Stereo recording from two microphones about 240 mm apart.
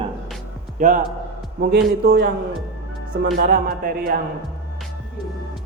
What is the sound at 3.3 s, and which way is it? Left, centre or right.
Speech, right.